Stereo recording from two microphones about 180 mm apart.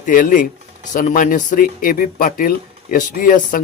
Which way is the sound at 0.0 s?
50° left (ahead or behind).